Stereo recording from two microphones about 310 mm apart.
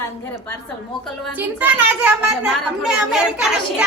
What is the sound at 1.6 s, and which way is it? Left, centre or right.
Speech, centre.